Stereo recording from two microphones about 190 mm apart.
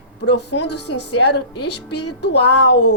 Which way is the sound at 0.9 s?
90° left.